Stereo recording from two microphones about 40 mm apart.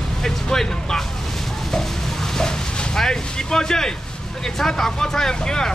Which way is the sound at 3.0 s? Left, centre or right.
Centre.